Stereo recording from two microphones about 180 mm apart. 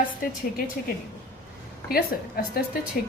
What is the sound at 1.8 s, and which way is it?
Speech, 55° left (ahead or behind).